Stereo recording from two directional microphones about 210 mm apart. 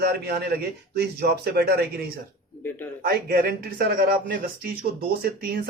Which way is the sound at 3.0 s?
45° right (ahead or behind).